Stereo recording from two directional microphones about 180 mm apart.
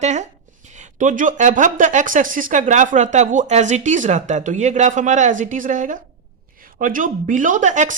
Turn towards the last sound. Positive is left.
turn(degrees=-45)  # may be behind; listen again after turning